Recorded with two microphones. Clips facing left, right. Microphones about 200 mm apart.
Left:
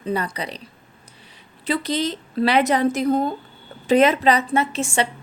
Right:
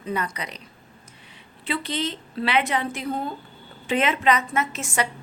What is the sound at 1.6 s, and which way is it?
A woman's voice, 40° left (ahead or behind).